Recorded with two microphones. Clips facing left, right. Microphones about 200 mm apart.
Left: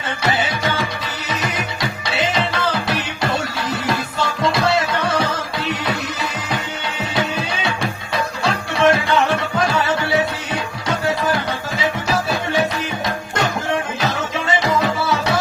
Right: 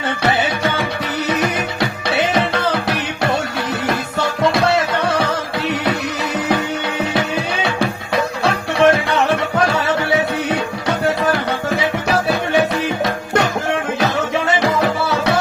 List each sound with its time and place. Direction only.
0.2 s music: 65° right (ahead or behind)
4.5 s music: 65° right (ahead or behind)
7.1 s music: 65° right (ahead or behind)
14.0 s music: 65° right (ahead or behind)